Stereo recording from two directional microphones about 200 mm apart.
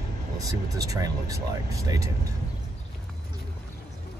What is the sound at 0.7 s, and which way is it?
Speech, 20° right (ahead or behind).